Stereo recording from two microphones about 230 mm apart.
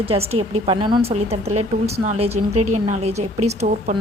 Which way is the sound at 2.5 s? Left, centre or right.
Right.